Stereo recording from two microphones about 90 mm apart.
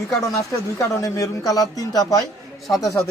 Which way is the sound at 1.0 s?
40° left (ahead or behind).